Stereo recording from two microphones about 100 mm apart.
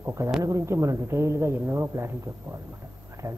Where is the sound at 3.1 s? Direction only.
30° right (ahead or behind).